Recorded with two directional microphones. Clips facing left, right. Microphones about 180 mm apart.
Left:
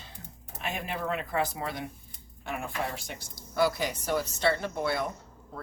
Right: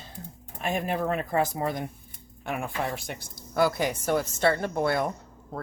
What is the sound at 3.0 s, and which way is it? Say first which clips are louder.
A woman's voice: right 4 dB; 55° right (ahead or behind).